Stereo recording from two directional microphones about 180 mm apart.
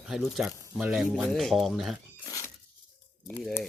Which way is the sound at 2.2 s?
20° left (ahead or behind).